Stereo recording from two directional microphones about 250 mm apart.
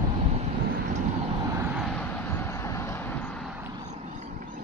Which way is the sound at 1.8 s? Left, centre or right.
Centre.